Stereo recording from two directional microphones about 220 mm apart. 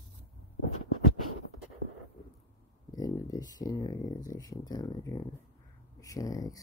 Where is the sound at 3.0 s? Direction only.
15° left (ahead or behind).